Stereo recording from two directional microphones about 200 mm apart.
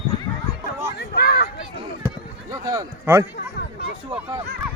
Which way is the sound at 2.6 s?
15° right (ahead or behind).